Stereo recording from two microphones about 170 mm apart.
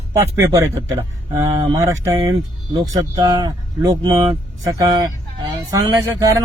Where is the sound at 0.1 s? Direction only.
20° right (ahead or behind).